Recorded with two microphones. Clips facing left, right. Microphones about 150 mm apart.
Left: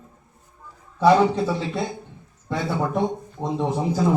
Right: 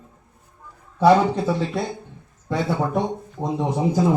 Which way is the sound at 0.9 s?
15° right (ahead or behind).